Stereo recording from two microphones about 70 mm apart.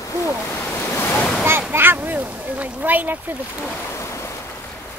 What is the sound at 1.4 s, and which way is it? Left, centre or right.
Speech, right.